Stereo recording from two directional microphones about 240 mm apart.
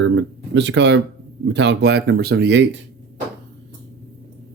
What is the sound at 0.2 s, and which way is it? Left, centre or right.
Speech, right.